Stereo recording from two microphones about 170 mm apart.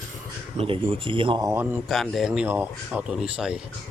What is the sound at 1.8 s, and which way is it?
Speech, centre (ahead or behind).